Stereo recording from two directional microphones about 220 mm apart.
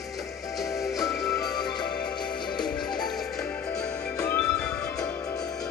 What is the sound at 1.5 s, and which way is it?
Music, 20° left (ahead or behind).